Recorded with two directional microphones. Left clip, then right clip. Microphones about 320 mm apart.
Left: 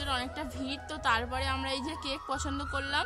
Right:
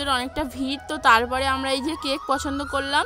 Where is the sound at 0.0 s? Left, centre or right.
Centre.